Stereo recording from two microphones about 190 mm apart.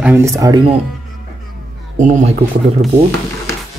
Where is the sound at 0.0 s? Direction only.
15° right (ahead or behind).